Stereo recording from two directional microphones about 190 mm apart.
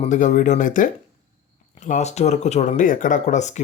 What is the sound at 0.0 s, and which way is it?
Speech, 40° left (ahead or behind).